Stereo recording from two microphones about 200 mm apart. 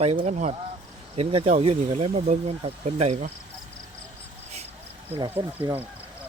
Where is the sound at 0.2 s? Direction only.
35° right (ahead or behind).